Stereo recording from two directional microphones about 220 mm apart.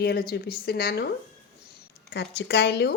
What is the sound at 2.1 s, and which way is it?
Speech, 50° left (ahead or behind).